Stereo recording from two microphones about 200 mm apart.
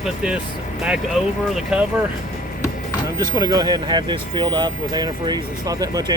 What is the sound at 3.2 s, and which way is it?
Speech, 20° right (ahead or behind).